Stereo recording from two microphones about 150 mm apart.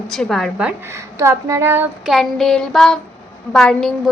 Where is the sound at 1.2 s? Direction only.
20° right (ahead or behind).